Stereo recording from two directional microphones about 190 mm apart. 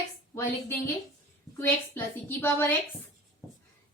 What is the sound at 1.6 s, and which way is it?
A woman's voice, 10° left (ahead or behind).